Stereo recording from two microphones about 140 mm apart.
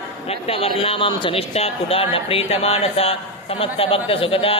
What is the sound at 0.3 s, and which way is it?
Speech, 45° left (ahead or behind).